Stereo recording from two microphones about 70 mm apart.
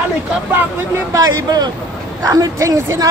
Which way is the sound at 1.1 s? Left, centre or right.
Right.